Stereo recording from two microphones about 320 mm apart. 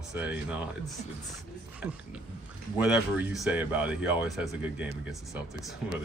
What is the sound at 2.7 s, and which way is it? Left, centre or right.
Speech, centre.